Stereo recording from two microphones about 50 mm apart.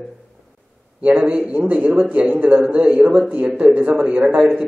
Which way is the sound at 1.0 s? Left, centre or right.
Right.